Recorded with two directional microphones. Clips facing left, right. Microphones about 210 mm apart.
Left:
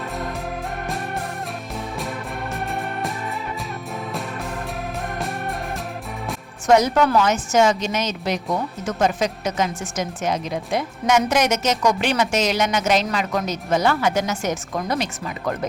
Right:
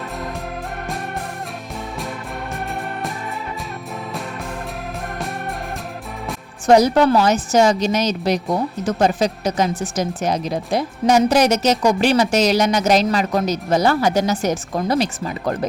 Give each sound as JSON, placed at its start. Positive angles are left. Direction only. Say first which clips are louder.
{"t": 6.7, "sound": "a woman's voice", "louder": "right 4 dB", "side_deg": -35}